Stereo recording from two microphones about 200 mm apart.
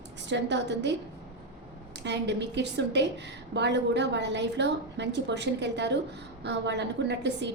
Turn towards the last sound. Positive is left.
turn(degrees=-60)  # may be behind; listen again after turning